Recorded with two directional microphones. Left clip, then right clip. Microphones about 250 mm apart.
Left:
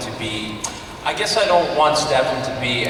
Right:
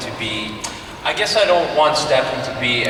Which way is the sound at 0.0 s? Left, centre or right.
Centre.